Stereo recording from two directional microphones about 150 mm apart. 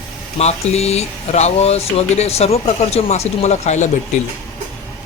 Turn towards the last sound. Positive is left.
turn(degrees=50)  # may be behind; listen again after turning